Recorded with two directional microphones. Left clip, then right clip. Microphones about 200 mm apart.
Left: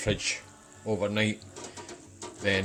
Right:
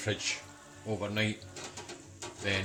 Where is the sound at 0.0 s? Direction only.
30° left (ahead or behind).